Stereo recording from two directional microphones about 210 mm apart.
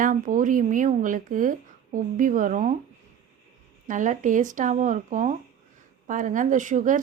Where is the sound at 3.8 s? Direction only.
35° right (ahead or behind).